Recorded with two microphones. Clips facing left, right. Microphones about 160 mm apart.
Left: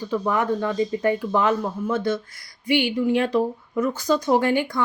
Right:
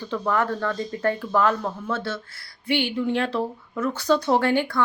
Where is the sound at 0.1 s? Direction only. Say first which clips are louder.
Left 2 dB; 15° left (ahead or behind).